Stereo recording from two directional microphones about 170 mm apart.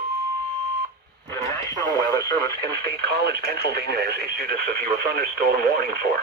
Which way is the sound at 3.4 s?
70° right (ahead or behind).